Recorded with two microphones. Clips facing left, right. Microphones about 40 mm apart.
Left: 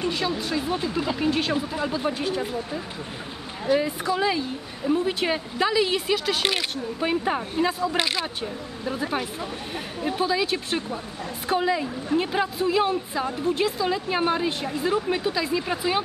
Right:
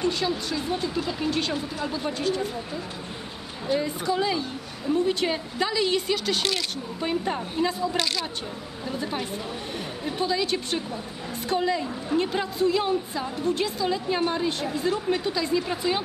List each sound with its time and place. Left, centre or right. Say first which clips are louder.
0.0 s speech: even; centre
4.0 s a woman's voice: left 1 dB; centre
6.4 s speech: left 2 dB; left
8.0 s speech: left 2 dB; left